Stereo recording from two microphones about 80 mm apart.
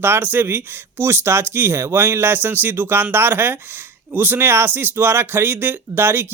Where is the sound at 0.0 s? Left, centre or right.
Right.